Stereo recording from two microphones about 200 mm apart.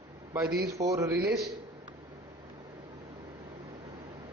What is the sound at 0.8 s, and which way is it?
Speech, 15° right (ahead or behind).